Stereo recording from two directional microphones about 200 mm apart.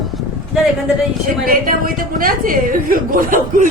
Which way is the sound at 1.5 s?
45° right (ahead or behind).